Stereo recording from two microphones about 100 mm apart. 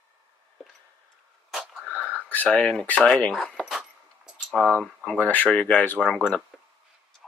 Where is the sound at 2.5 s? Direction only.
5° left (ahead or behind).